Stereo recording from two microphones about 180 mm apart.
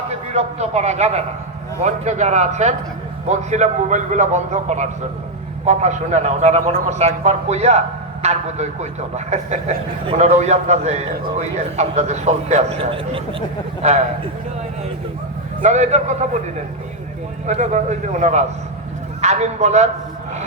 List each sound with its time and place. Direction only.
0.3 s a man's voice: 35° right (ahead or behind)
15.6 s a man's voice: 40° right (ahead or behind)
17.4 s a man's voice: 40° right (ahead or behind)